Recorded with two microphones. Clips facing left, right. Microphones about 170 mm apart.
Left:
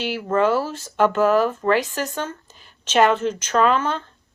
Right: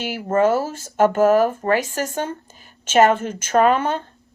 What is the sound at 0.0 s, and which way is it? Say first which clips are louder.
Speech: right 2 dB; 45° right (ahead or behind).